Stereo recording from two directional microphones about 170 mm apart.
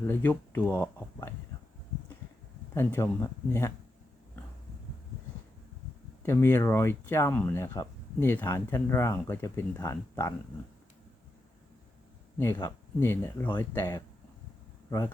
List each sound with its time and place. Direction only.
0.1 s speech: 10° left (ahead or behind)
2.7 s speech: 15° left (ahead or behind)
6.2 s speech: 15° left (ahead or behind)
12.5 s speech: 15° left (ahead or behind)